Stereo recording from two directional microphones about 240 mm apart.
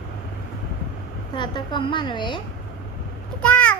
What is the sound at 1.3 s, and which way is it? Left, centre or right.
A woman's voice, centre.